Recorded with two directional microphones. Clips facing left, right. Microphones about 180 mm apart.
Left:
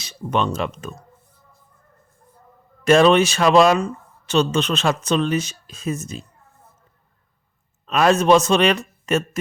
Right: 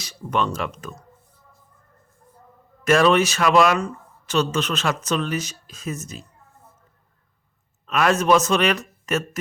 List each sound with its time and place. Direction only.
0.0 s speech: 25° left (ahead or behind)
2.8 s a man's voice: 25° left (ahead or behind)
7.9 s a man's voice: 25° left (ahead or behind)